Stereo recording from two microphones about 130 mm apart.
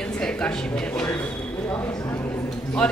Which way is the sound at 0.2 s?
5° left (ahead or behind).